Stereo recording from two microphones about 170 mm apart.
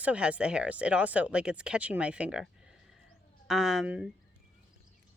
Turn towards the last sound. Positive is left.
turn(degrees=-5)  # may be behind; listen again after turning